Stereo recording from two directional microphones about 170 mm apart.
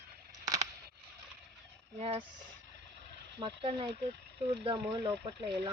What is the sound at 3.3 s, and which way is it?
Speech, 30° right (ahead or behind).